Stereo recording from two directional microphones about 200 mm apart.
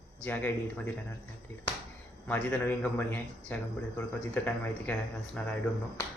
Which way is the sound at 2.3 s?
10° left (ahead or behind).